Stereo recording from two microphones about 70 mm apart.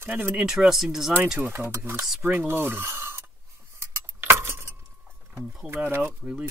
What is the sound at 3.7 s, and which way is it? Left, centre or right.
Keys jangling, right.